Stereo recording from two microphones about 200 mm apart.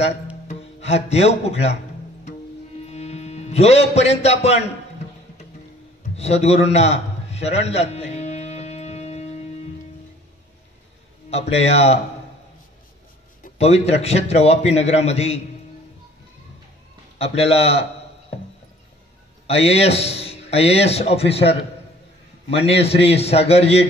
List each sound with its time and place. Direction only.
0.5 s speech: 30° left (ahead or behind)
2.9 s music: 35° left (ahead or behind)
6.1 s a sound: 30° left (ahead or behind)
11.2 s a man's voice: 30° left (ahead or behind)
13.4 s a man's voice: 30° left (ahead or behind)
17.2 s a man's voice: 30° left (ahead or behind)
19.4 s a man's voice: 30° left (ahead or behind)